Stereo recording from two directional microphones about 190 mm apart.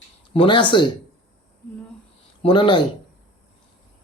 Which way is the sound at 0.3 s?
25° left (ahead or behind).